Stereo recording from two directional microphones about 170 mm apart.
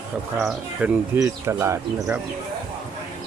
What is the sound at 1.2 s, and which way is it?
Speech, 15° right (ahead or behind).